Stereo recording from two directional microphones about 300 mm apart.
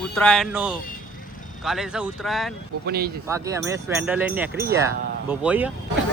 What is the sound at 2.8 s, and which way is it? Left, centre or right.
Speech, right.